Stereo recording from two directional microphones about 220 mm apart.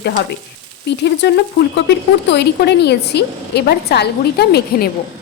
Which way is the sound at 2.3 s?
50° left (ahead or behind).